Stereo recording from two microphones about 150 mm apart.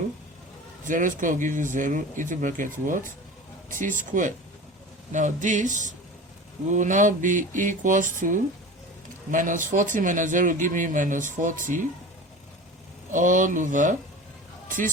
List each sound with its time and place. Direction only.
0.9 s speech: 60° right (ahead or behind)
13.1 s speech: 60° right (ahead or behind)